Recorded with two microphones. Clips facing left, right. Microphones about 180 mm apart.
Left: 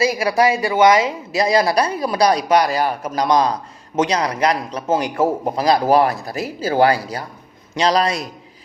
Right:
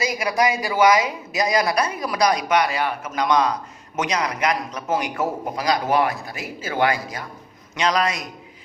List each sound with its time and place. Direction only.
0.0 s speech: 30° left (ahead or behind)